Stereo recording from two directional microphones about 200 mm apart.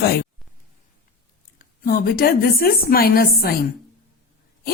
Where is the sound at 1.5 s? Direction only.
45° left (ahead or behind).